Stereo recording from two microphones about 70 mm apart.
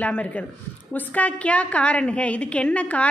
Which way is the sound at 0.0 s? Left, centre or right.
Left.